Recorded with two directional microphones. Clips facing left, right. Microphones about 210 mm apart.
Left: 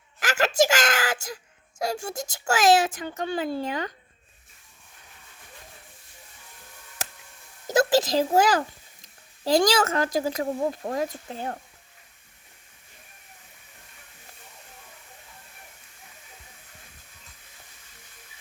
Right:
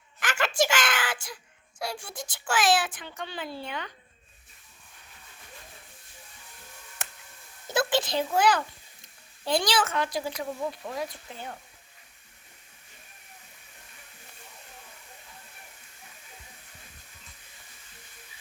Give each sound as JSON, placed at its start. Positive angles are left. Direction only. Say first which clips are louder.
{"t": 0.2, "sound": "a sound", "louder": "left 5 dB", "side_deg": 40}
{"t": 1.8, "sound": "speech", "louder": "left 7 dB", "side_deg": 45}
{"t": 7.7, "sound": "a child's voice", "louder": "left 6 dB", "side_deg": 40}